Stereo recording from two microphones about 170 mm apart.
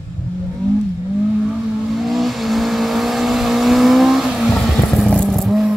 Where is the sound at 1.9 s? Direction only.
Centre (ahead or behind).